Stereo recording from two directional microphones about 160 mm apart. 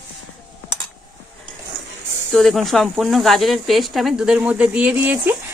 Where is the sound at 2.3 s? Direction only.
Centre (ahead or behind).